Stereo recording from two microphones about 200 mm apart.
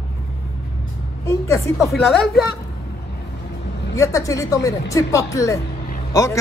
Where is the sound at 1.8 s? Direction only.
Centre (ahead or behind).